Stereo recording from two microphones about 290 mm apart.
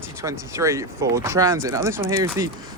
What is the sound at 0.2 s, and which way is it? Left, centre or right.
Speech, centre.